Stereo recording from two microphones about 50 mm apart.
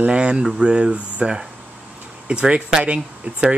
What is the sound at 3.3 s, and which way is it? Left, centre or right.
Speech, right.